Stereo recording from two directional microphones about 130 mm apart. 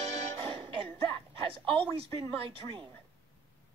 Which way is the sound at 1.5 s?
45° right (ahead or behind).